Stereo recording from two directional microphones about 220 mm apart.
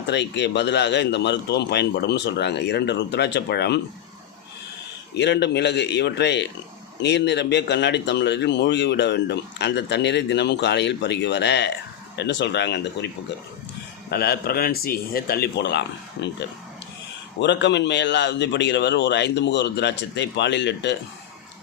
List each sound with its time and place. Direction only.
0.1 s a man's voice: 50° left (ahead or behind)
5.1 s a man's voice: 50° left (ahead or behind)
14.1 s a man's voice: 45° left (ahead or behind)
17.4 s a man's voice: 50° left (ahead or behind)